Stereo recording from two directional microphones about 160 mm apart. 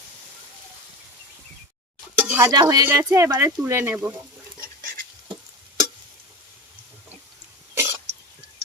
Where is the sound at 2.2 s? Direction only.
10° right (ahead or behind).